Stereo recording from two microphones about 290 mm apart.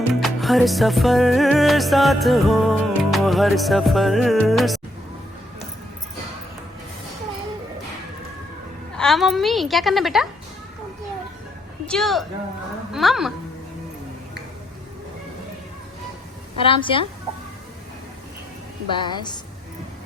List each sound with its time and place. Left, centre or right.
0.1 s music: centre
9.0 s music: centre
11.9 s music: centre
16.6 s a woman's voice: centre
18.9 s a woman's voice: centre